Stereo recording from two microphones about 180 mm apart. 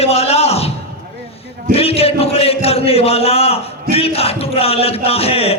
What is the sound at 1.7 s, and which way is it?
A man's voice, 35° left (ahead or behind).